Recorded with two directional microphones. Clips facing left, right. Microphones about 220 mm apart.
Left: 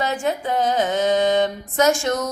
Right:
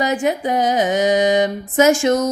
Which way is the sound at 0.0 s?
15° right (ahead or behind).